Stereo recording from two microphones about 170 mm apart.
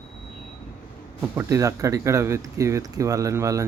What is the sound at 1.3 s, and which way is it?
Speech, 15° right (ahead or behind).